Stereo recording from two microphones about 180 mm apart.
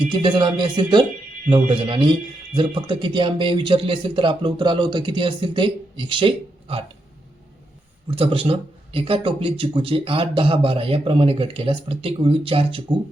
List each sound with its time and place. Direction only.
0.1 s speech: 25° right (ahead or behind)
8.0 s a man's voice: 30° right (ahead or behind)